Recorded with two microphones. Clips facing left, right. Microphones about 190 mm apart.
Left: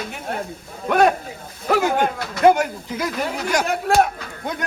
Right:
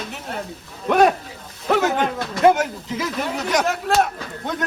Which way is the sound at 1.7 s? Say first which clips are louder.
Even; centre (ahead or behind).